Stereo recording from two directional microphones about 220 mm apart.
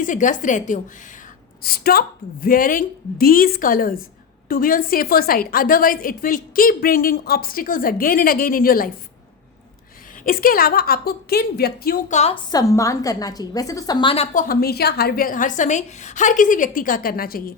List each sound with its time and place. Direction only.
0.0 s a woman's voice: 35° left (ahead or behind)
10.2 s a woman's voice: 40° left (ahead or behind)
12.5 s a woman's voice: 15° left (ahead or behind)
14.3 s a woman's voice: 40° left (ahead or behind)